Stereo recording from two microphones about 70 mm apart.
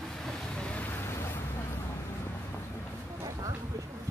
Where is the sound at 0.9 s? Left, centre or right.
Left.